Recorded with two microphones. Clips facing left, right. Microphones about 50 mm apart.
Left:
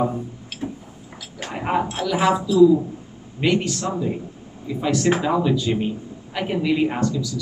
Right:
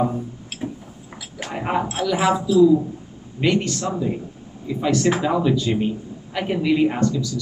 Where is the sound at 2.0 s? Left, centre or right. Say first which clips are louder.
Right 1 dB; centre.